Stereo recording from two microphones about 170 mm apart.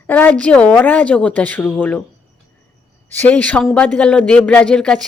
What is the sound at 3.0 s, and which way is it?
Speech, 10° left (ahead or behind).